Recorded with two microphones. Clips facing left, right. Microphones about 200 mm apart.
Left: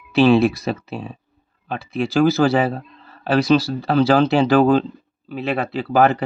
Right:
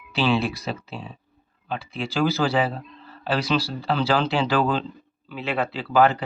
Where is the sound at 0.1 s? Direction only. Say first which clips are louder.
Left 9 dB; 45° left (ahead or behind).